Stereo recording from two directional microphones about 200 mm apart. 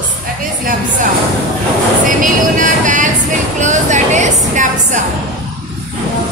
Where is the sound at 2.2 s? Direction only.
40° right (ahead or behind).